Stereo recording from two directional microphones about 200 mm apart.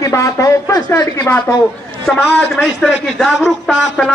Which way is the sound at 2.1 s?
5° left (ahead or behind).